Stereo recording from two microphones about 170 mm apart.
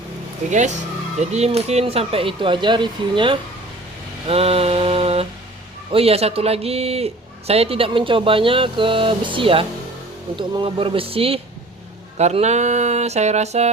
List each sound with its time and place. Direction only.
1.2 s a man's voice: 40° right (ahead or behind)
4.3 s mantra: 35° right (ahead or behind)
5.9 s a man's voice: 35° right (ahead or behind)